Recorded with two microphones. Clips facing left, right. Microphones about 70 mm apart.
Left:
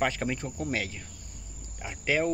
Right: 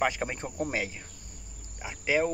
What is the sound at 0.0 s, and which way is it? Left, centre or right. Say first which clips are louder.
Speech: even; centre.